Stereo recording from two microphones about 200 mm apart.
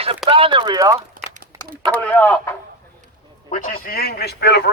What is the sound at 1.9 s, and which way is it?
Speech, 5° left (ahead or behind).